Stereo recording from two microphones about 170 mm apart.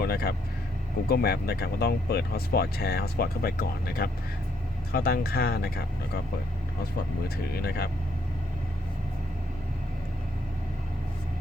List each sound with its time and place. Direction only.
0.0 s speech: 65° left (ahead or behind)
7.5 s speech: 70° left (ahead or behind)